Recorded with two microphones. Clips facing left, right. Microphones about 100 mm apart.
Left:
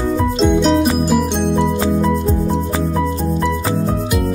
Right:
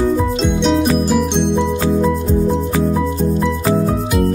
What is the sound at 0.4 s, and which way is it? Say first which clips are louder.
Music: left 2 dB; centre (ahead or behind).